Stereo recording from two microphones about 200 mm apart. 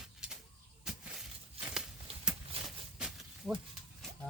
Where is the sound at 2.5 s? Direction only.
30° right (ahead or behind).